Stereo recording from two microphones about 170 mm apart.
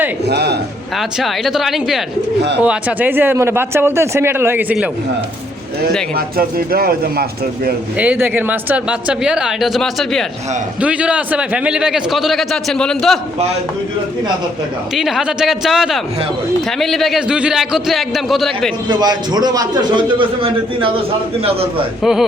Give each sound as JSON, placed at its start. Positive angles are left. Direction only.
{"t": 0.3, "sound": "a man's voice", "side_deg": -75}
{"t": 0.9, "sound": "a man's voice", "side_deg": 0}
{"t": 6.1, "sound": "speech", "side_deg": -60}
{"t": 7.9, "sound": "a man's voice", "side_deg": -10}
{"t": 14.9, "sound": "a man's voice", "side_deg": 0}
{"t": 18.9, "sound": "a man's voice", "side_deg": -25}